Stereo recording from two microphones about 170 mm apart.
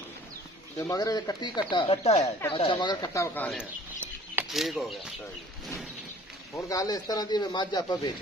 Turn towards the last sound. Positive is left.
turn(degrees=25)  # may be behind; listen again after turning